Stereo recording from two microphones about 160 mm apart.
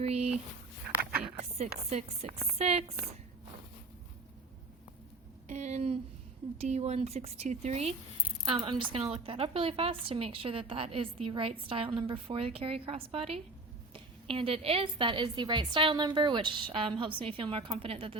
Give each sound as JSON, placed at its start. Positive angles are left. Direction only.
{"t": 0.0, "sound": "speech", "side_deg": -40}
{"t": 1.4, "sound": "chopping", "side_deg": -40}
{"t": 1.9, "sound": "a woman's voice", "side_deg": -40}
{"t": 5.5, "sound": "a woman's voice", "side_deg": -45}